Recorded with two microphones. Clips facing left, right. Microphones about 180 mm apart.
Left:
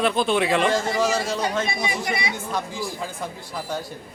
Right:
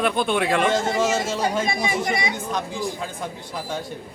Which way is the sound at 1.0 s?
25° right (ahead or behind).